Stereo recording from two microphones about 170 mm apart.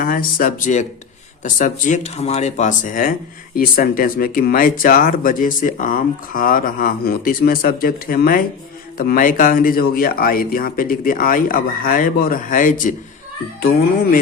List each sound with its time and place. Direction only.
0.0 s speech: 55° left (ahead or behind)